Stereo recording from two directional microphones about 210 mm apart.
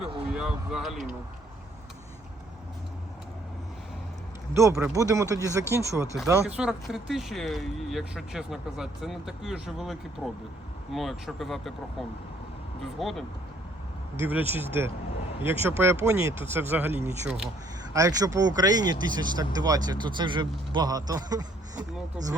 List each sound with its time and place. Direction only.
0.3 s speech: centre (ahead or behind)
4.5 s speech: 15° right (ahead or behind)
6.6 s speech: 5° right (ahead or behind)
17.9 s speech: 15° right (ahead or behind)